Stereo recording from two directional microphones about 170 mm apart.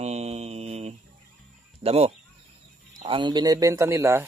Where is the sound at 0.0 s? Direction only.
40° right (ahead or behind).